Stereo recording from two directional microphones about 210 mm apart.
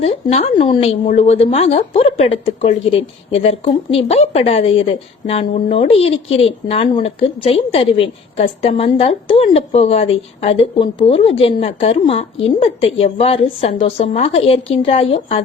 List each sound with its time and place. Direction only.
0.0 s a woman's voice: 30° left (ahead or behind)